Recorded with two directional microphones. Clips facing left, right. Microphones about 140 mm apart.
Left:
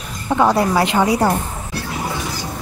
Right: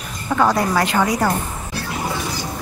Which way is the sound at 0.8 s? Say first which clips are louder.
Left 3 dB; 25° left (ahead or behind).